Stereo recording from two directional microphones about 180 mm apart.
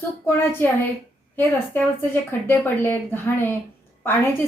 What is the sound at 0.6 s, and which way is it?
A woman's voice, 10° left (ahead or behind).